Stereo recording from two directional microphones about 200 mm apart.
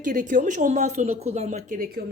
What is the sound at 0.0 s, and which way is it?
A woman's voice, 40° right (ahead or behind).